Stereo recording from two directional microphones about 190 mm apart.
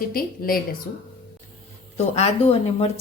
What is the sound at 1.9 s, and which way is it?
Speech, 35° left (ahead or behind).